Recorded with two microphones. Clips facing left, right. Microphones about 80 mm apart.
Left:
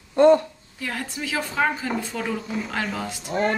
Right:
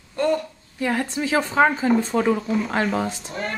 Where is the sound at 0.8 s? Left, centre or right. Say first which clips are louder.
Right 7 dB; right.